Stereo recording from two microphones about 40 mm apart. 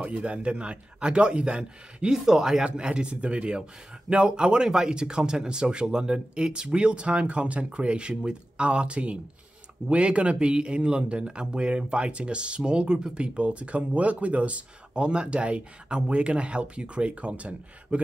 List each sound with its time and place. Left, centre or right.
0.0 s speech: right